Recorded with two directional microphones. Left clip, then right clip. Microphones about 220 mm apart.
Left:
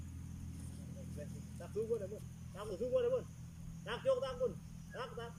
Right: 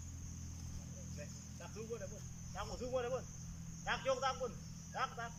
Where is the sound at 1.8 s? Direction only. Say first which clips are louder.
Left 9 dB; 25° left (ahead or behind).